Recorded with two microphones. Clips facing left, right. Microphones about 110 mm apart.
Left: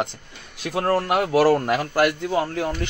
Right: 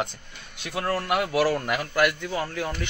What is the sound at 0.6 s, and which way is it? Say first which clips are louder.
A man's voice: left 6 dB; 40° left (ahead or behind).